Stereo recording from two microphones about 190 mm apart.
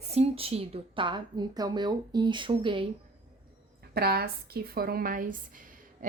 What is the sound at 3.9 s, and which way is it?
A woman's voice, 55° right (ahead or behind).